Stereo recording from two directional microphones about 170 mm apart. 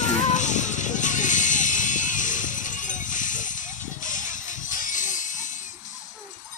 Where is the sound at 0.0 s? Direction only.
45° left (ahead or behind).